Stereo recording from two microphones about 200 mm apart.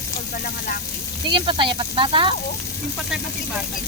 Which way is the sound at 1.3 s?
25° right (ahead or behind).